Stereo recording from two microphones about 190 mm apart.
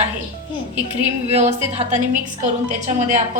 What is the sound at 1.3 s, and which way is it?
A woman's voice, 35° right (ahead or behind).